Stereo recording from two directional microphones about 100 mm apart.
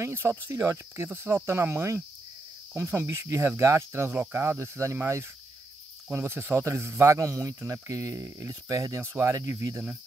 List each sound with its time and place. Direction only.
0.0 s speech: 25° right (ahead or behind)